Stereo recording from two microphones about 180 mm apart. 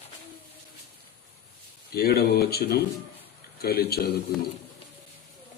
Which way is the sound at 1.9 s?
60° left (ahead or behind).